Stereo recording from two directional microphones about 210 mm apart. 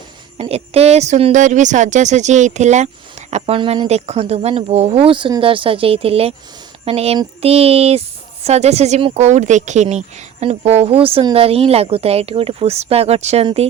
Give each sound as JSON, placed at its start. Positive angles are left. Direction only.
{"t": 0.3, "sound": "speech", "side_deg": -30}